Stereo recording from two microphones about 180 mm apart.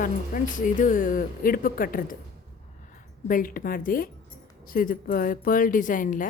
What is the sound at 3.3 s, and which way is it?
A woman's voice, 50° left (ahead or behind).